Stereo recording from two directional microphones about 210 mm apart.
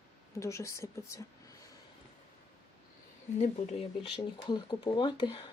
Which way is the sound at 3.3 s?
35° left (ahead or behind).